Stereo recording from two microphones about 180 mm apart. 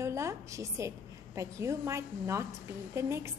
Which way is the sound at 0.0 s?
15° right (ahead or behind).